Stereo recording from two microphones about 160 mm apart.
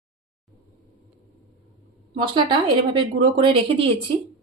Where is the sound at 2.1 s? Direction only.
30° right (ahead or behind).